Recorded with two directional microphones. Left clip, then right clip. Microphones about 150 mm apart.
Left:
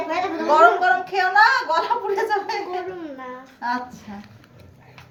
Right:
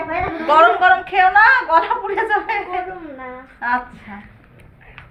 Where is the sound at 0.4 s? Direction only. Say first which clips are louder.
Right 3 dB; 20° right (ahead or behind).